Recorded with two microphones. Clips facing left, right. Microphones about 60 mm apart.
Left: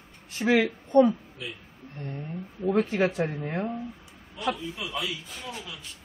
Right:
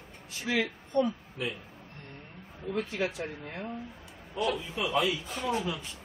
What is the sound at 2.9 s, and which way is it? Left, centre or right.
Speech, left.